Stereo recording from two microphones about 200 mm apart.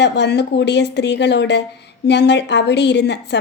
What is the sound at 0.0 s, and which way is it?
A woman's voice, 60° left (ahead or behind).